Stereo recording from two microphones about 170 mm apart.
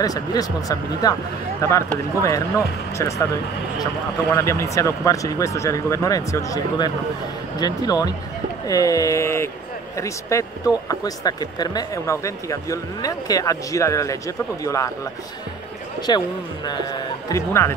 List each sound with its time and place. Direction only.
0.0 s speech: 20° left (ahead or behind)
4.4 s speech: 15° left (ahead or behind)
16.1 s speech: 25° left (ahead or behind)